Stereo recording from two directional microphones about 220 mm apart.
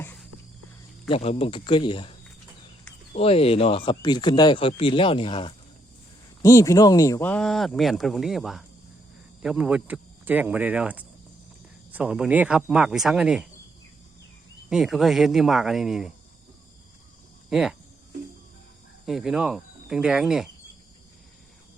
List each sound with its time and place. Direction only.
0.0 s a sound: 10° left (ahead or behind)
1.0 s speech: 25° left (ahead or behind)
3.2 s speech: 25° left (ahead or behind); by 13.5 s 5° right (ahead or behind)
14.7 s speech: centre (ahead or behind)
17.5 s speech: centre (ahead or behind)
19.0 s speech: centre (ahead or behind)